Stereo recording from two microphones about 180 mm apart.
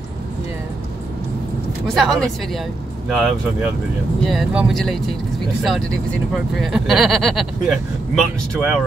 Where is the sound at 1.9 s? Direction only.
Centre (ahead or behind).